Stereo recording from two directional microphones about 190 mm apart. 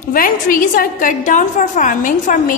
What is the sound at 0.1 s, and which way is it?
A woman's voice, 45° left (ahead or behind).